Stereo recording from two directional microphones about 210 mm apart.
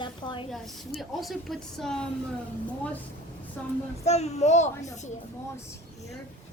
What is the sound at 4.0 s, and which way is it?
Speech, 30° left (ahead or behind).